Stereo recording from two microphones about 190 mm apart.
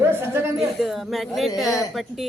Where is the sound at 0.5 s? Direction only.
Centre (ahead or behind).